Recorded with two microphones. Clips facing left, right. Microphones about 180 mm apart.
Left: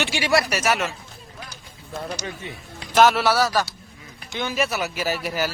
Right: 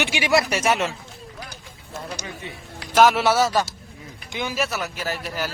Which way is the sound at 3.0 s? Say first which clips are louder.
Even; 10° right (ahead or behind).